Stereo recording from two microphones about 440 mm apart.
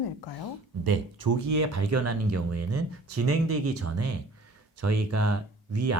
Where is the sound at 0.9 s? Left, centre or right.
Right.